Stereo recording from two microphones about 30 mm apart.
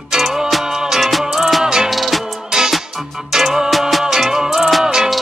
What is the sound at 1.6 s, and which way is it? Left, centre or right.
Music, right.